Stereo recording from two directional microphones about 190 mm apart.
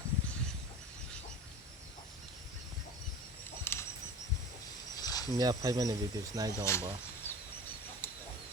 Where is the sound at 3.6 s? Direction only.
15° left (ahead or behind).